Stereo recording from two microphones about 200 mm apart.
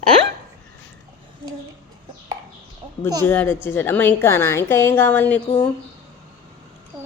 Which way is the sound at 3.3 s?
10° left (ahead or behind).